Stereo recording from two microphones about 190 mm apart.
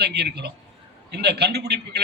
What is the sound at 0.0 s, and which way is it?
A man's voice, 60° right (ahead or behind).